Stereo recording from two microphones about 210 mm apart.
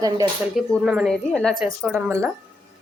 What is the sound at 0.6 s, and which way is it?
Speech, centre (ahead or behind).